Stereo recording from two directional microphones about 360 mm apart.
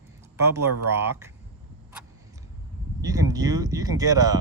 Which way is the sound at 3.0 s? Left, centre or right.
Centre.